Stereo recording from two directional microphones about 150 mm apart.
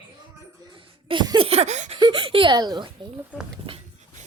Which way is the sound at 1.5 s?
45° right (ahead or behind).